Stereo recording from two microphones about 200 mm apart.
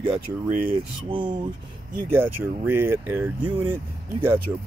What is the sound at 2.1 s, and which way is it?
Speech, 10° right (ahead or behind).